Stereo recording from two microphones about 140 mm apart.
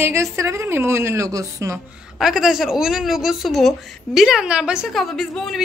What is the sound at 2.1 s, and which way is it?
A woman's voice, 5° right (ahead or behind).